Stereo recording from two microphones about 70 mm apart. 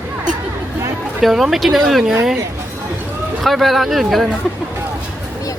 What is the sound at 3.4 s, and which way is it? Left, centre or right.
Speech, centre.